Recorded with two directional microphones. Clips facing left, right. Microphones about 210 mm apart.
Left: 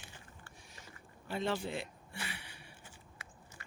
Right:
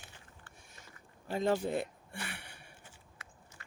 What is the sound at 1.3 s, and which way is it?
Speech, 40° right (ahead or behind).